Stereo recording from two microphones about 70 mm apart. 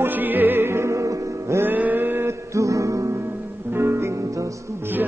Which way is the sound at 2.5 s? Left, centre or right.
Right.